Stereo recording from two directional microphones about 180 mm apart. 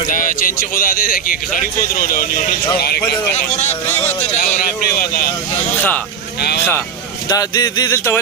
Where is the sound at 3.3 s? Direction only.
40° left (ahead or behind); by 5.2 s 55° left (ahead or behind).